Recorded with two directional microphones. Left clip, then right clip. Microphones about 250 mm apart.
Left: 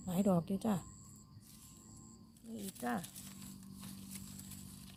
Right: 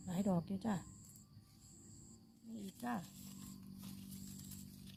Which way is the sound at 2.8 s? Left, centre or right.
Left.